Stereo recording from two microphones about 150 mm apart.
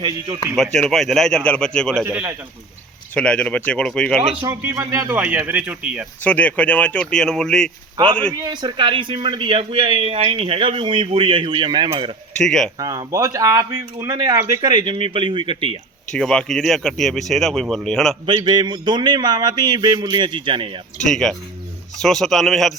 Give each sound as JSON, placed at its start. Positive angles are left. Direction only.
{"t": 0.5, "sound": "speech", "side_deg": 5}
{"t": 2.0, "sound": "a man's voice", "side_deg": -10}
{"t": 3.2, "sound": "speech", "side_deg": 5}
{"t": 4.4, "sound": "a man's voice", "side_deg": -20}
{"t": 6.2, "sound": "speech", "side_deg": 10}
{"t": 8.4, "sound": "speech", "side_deg": -30}
{"t": 12.4, "sound": "speech", "side_deg": 5}
{"t": 12.8, "sound": "speech", "side_deg": -25}
{"t": 16.1, "sound": "speech", "side_deg": 5}
{"t": 18.3, "sound": "speech", "side_deg": -30}
{"t": 21.0, "sound": "speech", "side_deg": 5}